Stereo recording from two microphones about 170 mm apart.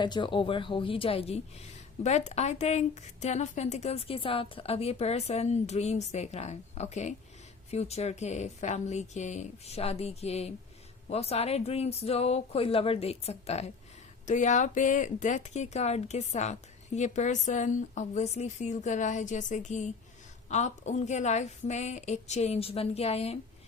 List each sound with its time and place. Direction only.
0.0 s a woman's voice: 25° left (ahead or behind)